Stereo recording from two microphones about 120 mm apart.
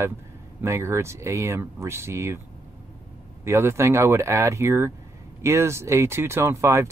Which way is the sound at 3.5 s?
20° right (ahead or behind).